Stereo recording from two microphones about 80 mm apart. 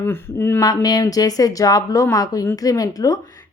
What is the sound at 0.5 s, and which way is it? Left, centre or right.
A woman's voice, left.